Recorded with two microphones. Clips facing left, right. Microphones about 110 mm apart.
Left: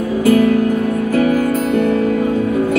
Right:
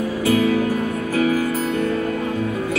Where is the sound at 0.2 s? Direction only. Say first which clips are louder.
Left 6 dB; 50° left (ahead or behind).